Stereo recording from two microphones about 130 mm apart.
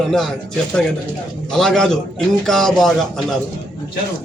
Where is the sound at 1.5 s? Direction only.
5° left (ahead or behind).